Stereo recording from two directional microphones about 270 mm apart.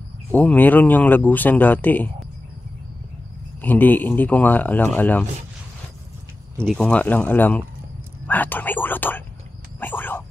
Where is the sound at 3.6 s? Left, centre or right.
Centre.